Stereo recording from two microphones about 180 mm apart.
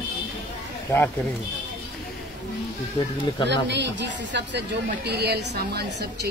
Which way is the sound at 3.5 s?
75° right (ahead or behind).